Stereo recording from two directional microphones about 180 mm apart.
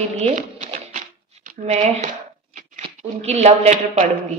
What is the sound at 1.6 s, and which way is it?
Speech, 40° right (ahead or behind).